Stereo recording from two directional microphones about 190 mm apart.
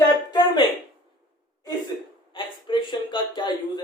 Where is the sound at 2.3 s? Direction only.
25° left (ahead or behind).